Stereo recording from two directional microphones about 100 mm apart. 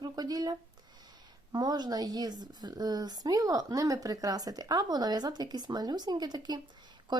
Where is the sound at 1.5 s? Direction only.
45° right (ahead or behind).